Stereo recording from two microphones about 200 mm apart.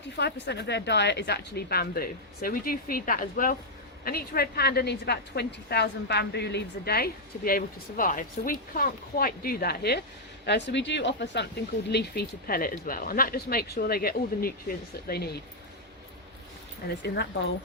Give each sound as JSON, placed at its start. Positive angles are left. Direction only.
{"t": 0.2, "sound": "a woman's voice", "side_deg": 60}
{"t": 17.0, "sound": "speech", "side_deg": 60}